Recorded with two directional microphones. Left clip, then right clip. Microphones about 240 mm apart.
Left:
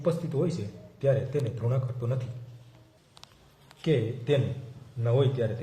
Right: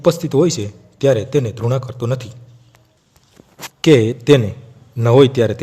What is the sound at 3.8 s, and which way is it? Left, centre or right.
A man's voice, right.